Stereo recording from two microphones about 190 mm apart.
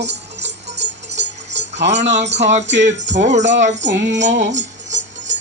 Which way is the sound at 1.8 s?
35° right (ahead or behind).